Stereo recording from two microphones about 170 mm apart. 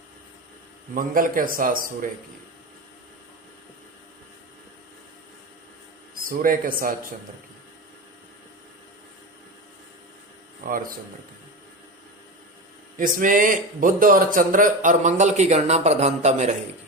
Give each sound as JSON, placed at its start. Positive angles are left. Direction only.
{"t": 0.9, "sound": "a man's voice", "side_deg": -55}
{"t": 6.1, "sound": "speech", "side_deg": -55}
{"t": 10.6, "sound": "a man's voice", "side_deg": -55}
{"t": 13.0, "sound": "a man's voice", "side_deg": -50}